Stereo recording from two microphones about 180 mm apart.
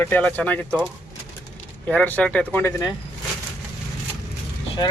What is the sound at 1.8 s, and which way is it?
Speech, 10° left (ahead or behind).